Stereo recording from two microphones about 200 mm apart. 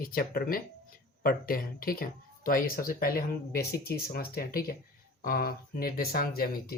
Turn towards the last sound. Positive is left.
turn(degrees=50)  # may be behind; listen again after turning